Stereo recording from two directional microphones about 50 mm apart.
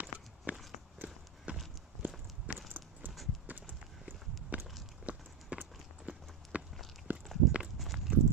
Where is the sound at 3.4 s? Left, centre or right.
Right.